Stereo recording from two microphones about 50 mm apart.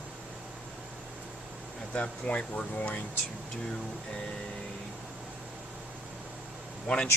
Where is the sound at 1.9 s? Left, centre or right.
Left.